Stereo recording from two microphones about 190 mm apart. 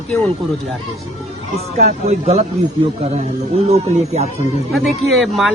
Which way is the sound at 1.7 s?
35° right (ahead or behind).